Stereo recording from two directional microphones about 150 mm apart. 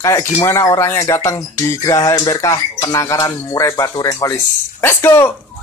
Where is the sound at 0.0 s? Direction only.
20° left (ahead or behind).